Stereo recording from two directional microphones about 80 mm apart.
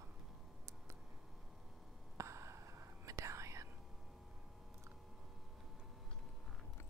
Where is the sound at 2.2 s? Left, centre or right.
Right.